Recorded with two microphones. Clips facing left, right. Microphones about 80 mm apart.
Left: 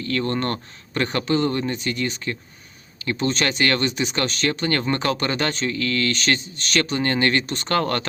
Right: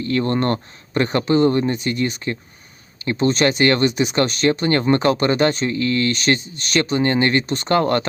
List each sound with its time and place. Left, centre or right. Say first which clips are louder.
0.0 s speech: right 4 dB; right
3.2 s speech: right 6 dB; right
3.6 s speech: right 5 dB; right
7.4 s speech: right 5 dB; right
7.7 s speech: right 5 dB; right